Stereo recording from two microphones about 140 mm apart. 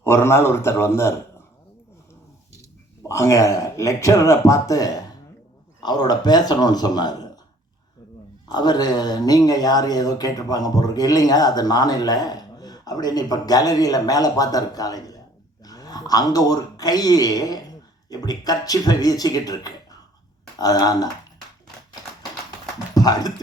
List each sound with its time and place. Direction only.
0.0 s a man's voice: 15° left (ahead or behind)
3.1 s speech: 20° left (ahead or behind)
8.4 s speech: 30° left (ahead or behind)
23.0 s speech: 25° left (ahead or behind)